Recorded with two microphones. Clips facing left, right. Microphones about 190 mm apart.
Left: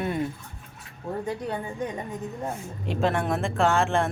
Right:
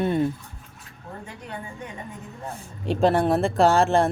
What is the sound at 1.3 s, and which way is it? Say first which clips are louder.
Speech: left 10 dB; 35° left (ahead or behind).